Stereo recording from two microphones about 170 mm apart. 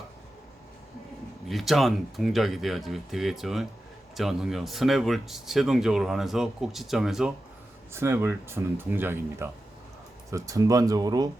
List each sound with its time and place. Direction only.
1.5 s speech: centre (ahead or behind)
7.9 s speech: 15° right (ahead or behind)